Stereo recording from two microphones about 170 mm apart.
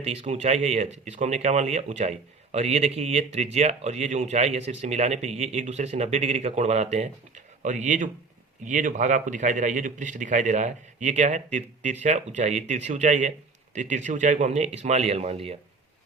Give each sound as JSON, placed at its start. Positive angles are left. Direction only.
{"t": 0.0, "sound": "a man's voice", "side_deg": -40}